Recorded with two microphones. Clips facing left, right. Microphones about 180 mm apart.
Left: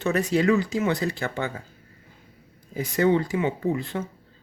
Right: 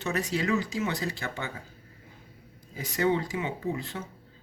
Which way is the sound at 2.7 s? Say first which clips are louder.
Left 5 dB; 55° left (ahead or behind).